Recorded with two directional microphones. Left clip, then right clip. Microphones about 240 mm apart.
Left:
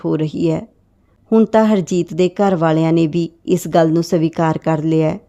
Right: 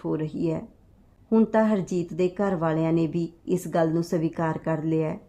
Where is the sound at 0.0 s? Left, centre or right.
Left.